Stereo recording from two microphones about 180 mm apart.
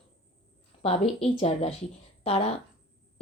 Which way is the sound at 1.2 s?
35° left (ahead or behind).